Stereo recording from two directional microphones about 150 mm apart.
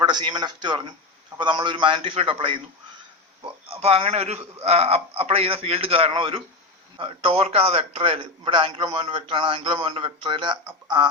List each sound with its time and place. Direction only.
0.0 s a man's voice: 30° right (ahead or behind)